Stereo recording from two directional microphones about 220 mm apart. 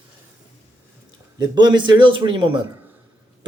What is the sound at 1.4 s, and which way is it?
Speech, 20° right (ahead or behind).